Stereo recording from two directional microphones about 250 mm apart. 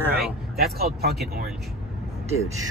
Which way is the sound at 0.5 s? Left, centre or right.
Right.